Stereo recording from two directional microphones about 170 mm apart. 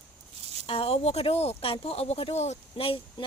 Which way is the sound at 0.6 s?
35° left (ahead or behind).